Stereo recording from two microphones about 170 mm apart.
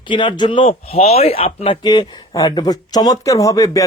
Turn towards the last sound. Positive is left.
turn(degrees=20)  # may be behind; listen again after turning